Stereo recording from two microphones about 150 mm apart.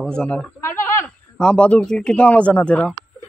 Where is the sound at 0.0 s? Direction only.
5° left (ahead or behind).